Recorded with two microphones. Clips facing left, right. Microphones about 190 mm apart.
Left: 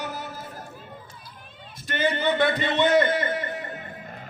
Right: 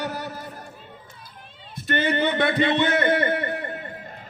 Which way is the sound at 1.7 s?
60° right (ahead or behind).